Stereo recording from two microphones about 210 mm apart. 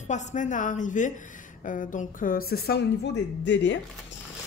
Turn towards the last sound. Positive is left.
turn(degrees=55)  # may be behind; listen again after turning